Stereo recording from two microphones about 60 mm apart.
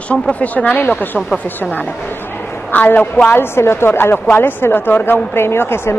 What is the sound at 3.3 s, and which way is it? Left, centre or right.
Speech, left.